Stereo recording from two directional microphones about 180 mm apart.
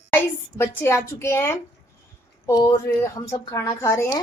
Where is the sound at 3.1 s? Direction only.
15° left (ahead or behind).